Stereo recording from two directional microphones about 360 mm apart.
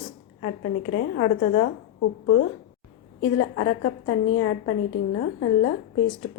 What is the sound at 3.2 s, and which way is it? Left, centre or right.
A woman's voice, left.